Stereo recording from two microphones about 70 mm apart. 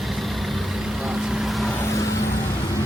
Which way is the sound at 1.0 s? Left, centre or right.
Centre.